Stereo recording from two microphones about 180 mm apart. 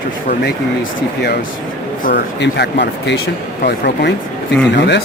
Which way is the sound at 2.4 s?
75° left (ahead or behind).